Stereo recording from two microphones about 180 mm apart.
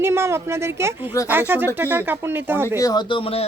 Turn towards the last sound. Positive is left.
turn(degrees=30)  # may be behind; listen again after turning